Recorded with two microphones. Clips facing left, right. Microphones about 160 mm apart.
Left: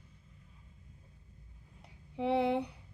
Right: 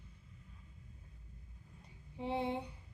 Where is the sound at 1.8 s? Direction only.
75° left (ahead or behind).